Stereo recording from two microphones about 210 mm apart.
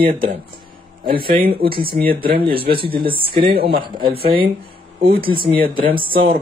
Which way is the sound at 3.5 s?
45° right (ahead or behind).